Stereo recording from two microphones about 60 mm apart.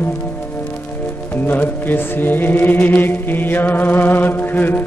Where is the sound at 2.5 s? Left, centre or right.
Left.